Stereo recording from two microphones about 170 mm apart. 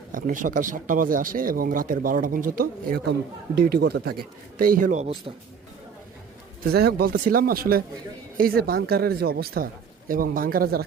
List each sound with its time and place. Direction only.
0.1 s speech: 50° right (ahead or behind)
6.7 s speech: 65° right (ahead or behind)
10.1 s speech: 55° right (ahead or behind)